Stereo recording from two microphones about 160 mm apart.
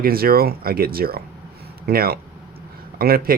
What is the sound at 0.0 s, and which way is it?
Speech, 70° right (ahead or behind).